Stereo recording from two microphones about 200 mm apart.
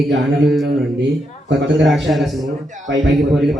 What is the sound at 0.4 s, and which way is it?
Speech, centre (ahead or behind).